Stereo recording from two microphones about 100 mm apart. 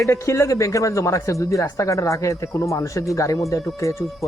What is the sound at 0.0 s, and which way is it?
Speech, 30° left (ahead or behind).